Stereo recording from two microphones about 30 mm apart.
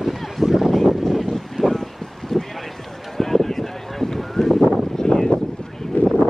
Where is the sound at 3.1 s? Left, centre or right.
Centre.